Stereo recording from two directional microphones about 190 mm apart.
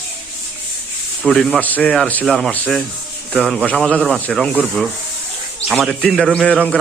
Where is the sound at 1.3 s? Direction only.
5° left (ahead or behind).